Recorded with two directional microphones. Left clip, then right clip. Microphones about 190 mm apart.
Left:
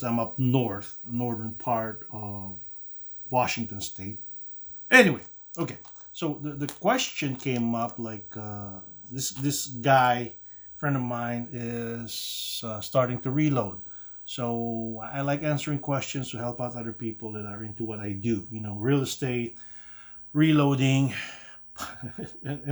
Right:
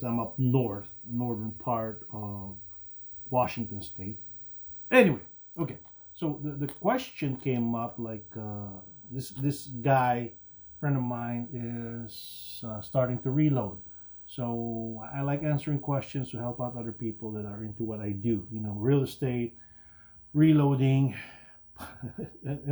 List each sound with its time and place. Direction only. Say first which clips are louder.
0.0 s speech: left 4 dB; 30° left (ahead or behind)